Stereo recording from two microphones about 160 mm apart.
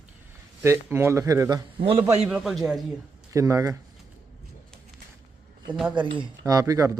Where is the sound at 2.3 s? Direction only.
Centre (ahead or behind).